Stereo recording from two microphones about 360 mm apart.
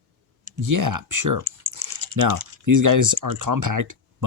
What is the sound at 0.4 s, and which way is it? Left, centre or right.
Speech, right.